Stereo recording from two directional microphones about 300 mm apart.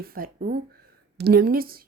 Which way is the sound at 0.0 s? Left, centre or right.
Right.